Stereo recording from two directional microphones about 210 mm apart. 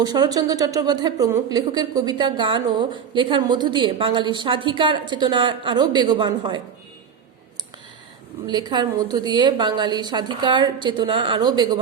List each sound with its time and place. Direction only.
0.0 s a woman's voice: 20° right (ahead or behind)
8.4 s a woman's voice: 20° right (ahead or behind)